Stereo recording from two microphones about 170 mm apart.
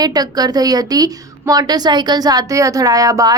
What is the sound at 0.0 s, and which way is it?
A woman's voice, 25° right (ahead or behind).